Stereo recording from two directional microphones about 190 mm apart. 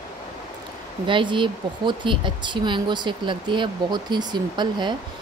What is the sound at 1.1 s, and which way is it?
Speech, 25° right (ahead or behind).